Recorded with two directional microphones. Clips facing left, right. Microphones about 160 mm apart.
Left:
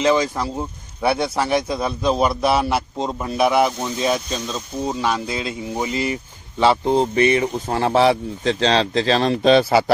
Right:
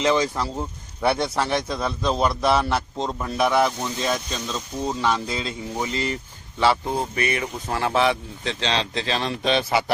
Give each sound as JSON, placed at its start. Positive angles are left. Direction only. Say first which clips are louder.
{"t": 0.0, "sound": "a man's voice", "louder": "left 3 dB", "side_deg": 15}
{"t": 6.6, "sound": "a man's voice", "louder": "left 5 dB", "side_deg": 20}